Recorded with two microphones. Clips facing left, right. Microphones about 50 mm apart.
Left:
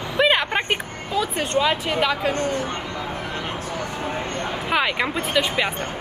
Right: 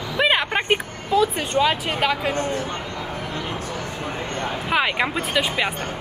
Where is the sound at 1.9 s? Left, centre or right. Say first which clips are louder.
Left 1 dB; centre.